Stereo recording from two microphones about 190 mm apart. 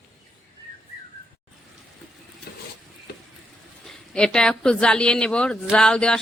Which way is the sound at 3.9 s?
5° left (ahead or behind).